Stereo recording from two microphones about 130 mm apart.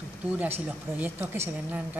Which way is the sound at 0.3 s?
10° right (ahead or behind).